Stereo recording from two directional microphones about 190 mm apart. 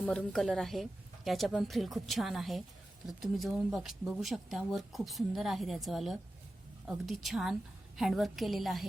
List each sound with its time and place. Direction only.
0.0 s speech: 5° left (ahead or behind)